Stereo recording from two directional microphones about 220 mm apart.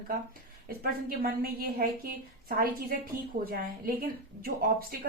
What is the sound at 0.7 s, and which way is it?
A woman's voice, 40° right (ahead or behind).